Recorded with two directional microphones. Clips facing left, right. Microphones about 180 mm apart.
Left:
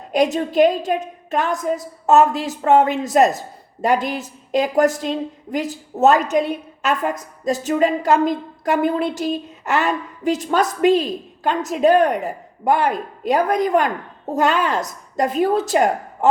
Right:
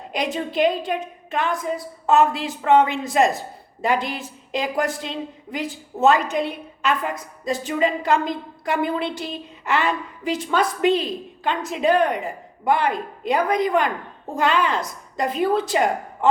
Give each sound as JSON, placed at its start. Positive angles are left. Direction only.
{"t": 0.1, "sound": "a woman's voice", "side_deg": 45}